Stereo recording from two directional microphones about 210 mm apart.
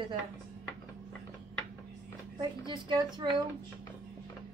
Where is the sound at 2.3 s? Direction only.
20° right (ahead or behind).